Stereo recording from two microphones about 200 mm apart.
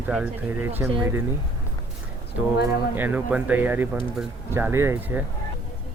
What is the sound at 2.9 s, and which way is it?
Speech, 10° right (ahead or behind).